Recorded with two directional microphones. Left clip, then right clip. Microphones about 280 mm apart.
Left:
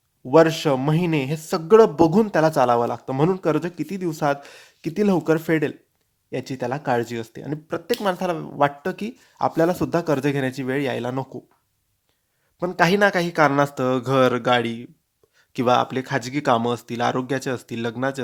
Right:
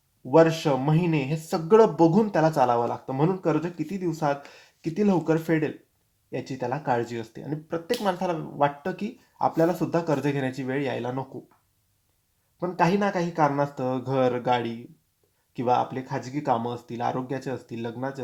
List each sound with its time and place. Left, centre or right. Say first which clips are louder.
0.3 s speech: left 3 dB; left
12.5 s speech: left 5 dB; left